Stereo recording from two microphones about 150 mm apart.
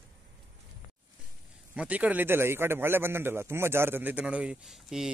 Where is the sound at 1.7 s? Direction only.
10° right (ahead or behind).